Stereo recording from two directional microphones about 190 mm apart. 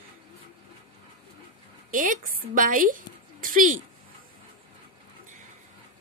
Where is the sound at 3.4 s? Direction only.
45° right (ahead or behind).